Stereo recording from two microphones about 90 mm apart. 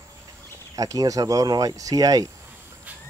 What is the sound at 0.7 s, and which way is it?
Speech, 40° right (ahead or behind).